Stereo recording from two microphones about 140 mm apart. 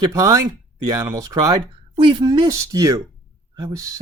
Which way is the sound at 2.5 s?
20° right (ahead or behind).